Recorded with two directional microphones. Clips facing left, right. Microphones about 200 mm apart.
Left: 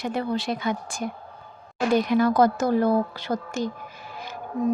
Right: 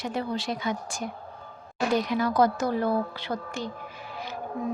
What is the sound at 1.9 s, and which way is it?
A woman's voice, 55° left (ahead or behind).